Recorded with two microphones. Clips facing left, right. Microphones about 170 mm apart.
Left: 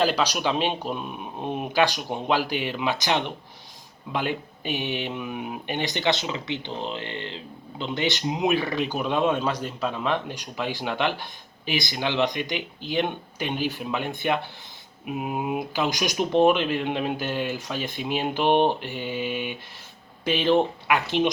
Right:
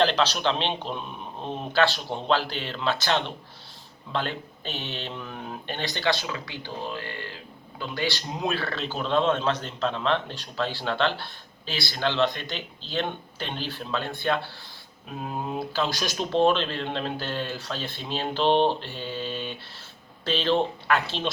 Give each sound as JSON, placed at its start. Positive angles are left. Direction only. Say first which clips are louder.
{"t": 0.0, "sound": "speech", "louder": "even", "side_deg": 10}